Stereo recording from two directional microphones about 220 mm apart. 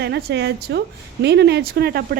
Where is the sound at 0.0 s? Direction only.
50° right (ahead or behind).